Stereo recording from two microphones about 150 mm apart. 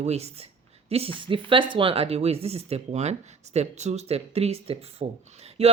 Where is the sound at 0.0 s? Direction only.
45° right (ahead or behind).